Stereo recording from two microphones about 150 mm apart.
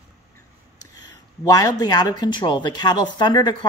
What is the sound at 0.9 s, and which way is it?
Speech, 25° left (ahead or behind).